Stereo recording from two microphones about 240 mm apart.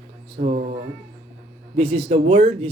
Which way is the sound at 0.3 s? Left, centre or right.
Right.